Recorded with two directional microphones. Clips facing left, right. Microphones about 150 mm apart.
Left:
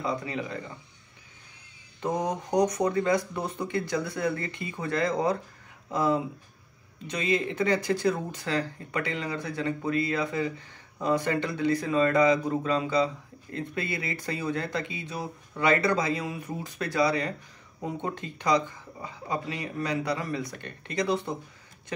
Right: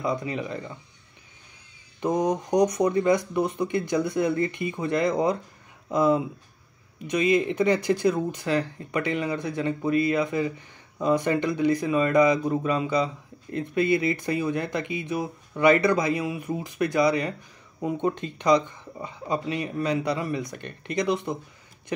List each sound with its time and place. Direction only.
0.0 s speech: 20° right (ahead or behind)
2.0 s a man's voice: 15° right (ahead or behind)